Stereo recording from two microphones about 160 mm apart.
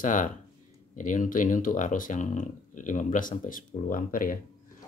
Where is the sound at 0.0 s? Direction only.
55° left (ahead or behind).